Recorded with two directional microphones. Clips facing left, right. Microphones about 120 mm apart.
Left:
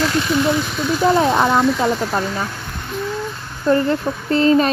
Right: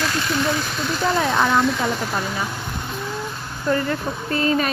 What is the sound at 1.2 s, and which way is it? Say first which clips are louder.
Speech: left 4 dB; 25° left (ahead or behind).